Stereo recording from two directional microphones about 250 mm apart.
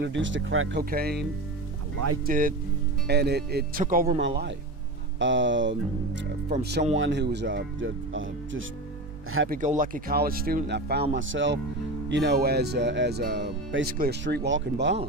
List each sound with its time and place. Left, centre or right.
0.0 s speech: right
0.8 s speech: right
2.2 s speech: right
9.5 s speech: right